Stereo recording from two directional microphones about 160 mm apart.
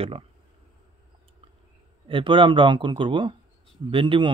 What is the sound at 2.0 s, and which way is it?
Speech, 30° right (ahead or behind).